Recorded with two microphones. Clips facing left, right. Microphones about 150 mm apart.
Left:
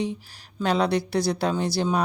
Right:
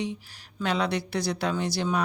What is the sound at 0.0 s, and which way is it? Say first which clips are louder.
Speech: left 3 dB; 35° left (ahead or behind).